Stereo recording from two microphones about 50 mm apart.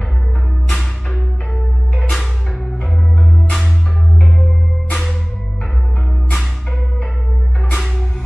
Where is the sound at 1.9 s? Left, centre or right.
Centre.